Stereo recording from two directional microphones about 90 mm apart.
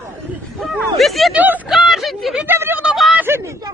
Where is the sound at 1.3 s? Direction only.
20° right (ahead or behind).